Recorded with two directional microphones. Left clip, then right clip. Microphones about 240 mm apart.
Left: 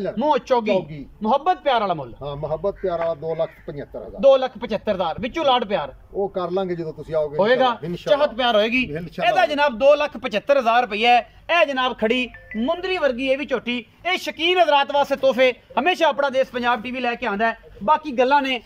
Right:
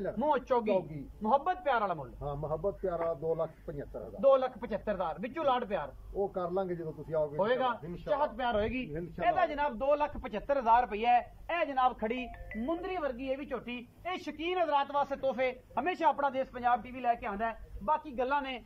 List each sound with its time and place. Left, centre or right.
0.0 s a man's voice: centre
4.2 s a man's voice: centre
6.3 s a man's voice: centre
7.3 s a man's voice: centre
8.0 s a man's voice: left